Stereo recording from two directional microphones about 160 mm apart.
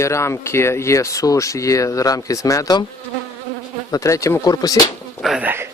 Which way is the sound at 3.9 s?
20° left (ahead or behind).